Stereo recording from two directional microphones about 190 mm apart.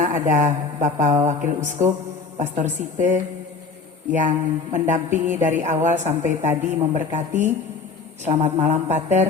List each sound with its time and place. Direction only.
0.0 s speech: 40° right (ahead or behind)